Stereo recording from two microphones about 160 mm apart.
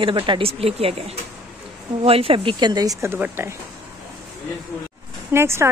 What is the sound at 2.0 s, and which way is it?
Speech, 35° right (ahead or behind).